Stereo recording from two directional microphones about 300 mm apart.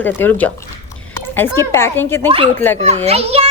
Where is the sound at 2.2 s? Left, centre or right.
Centre.